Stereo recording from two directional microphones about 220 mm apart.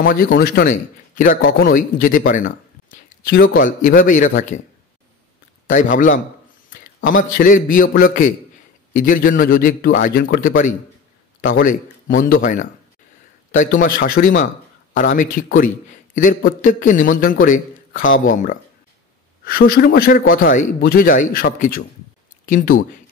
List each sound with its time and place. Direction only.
0.0 s a man's voice: 40° left (ahead or behind)